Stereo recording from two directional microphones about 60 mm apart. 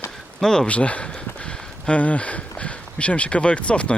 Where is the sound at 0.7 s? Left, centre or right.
Left.